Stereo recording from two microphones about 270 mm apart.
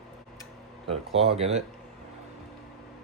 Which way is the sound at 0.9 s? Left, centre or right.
Right.